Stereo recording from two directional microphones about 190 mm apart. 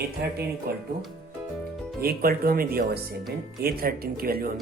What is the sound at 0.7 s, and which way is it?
Speech, 50° right (ahead or behind).